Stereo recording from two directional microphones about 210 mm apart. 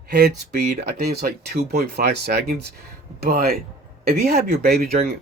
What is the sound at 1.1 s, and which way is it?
Speech, 50° right (ahead or behind).